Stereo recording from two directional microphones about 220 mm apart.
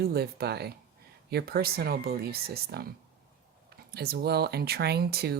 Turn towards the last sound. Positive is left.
turn(degrees=-45)  # may be behind; listen again after turning